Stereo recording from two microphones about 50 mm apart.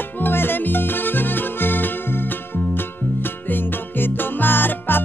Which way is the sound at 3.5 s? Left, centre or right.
Left.